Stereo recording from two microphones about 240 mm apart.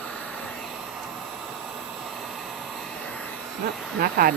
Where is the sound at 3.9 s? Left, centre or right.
Right.